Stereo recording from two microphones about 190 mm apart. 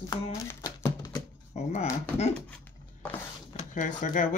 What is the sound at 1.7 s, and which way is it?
Speech, 35° left (ahead or behind).